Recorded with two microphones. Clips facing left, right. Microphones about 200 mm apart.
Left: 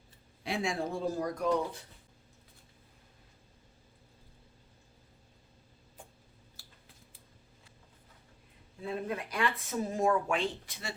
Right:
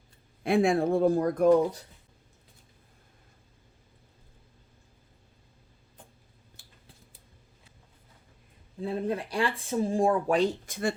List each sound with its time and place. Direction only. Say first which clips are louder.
0.4 s speech: right 10 dB; 55° right (ahead or behind)
8.8 s speech: right 6 dB; 30° right (ahead or behind); by 10.9 s 50° right (ahead or behind)